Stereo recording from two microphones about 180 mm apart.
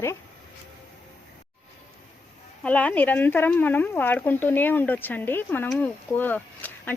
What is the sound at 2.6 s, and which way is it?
Speech, 10° left (ahead or behind).